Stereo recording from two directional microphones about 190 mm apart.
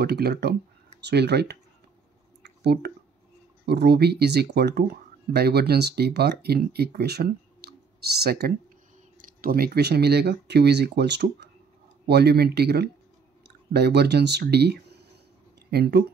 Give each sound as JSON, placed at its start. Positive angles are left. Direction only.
{"t": 0.0, "sound": "speech", "side_deg": -55}
{"t": 2.4, "sound": "a sound", "side_deg": -60}
{"t": 3.6, "sound": "speech", "side_deg": -60}